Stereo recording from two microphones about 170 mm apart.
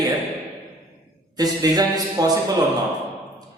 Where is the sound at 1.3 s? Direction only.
20° right (ahead or behind).